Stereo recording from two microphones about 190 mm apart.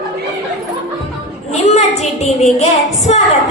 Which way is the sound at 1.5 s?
35° left (ahead or behind).